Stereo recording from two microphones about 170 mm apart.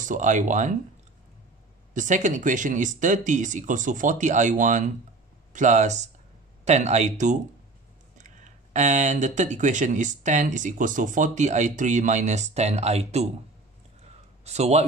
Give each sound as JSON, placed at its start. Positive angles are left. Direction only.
{"t": 0.0, "sound": "speech", "side_deg": -45}
{"t": 2.0, "sound": "speech", "side_deg": -45}
{"t": 14.4, "sound": "speech", "side_deg": -40}